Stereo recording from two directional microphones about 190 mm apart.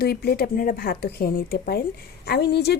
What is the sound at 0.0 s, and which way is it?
A woman's voice, 55° left (ahead or behind).